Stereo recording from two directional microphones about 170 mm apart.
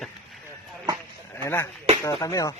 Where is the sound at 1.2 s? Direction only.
15° left (ahead or behind).